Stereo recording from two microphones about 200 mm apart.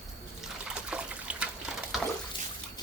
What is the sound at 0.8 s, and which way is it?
Water, 5° right (ahead or behind).